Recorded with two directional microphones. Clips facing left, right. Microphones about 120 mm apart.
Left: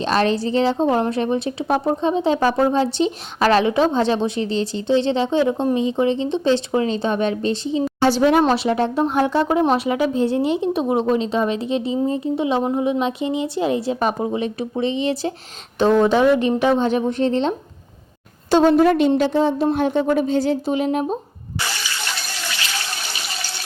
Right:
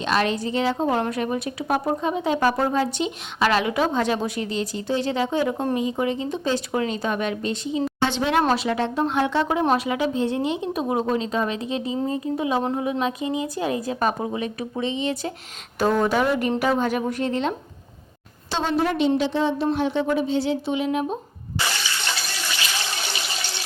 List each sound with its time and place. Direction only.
0.0 s a woman's voice: 35° left (ahead or behind)
15.8 s a woman's voice: 20° left (ahead or behind)
18.5 s speech: 45° left (ahead or behind)